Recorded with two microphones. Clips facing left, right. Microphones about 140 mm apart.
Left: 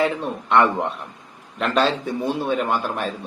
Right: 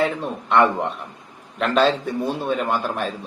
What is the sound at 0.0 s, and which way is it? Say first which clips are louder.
A man's voice: left 1 dB; centre (ahead or behind).